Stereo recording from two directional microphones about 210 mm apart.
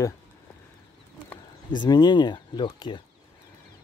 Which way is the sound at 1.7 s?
20° left (ahead or behind).